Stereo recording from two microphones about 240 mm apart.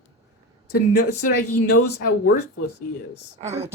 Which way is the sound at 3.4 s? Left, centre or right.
Right.